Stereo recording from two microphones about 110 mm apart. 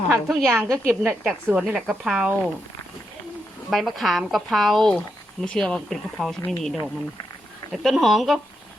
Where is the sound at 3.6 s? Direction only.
Centre (ahead or behind).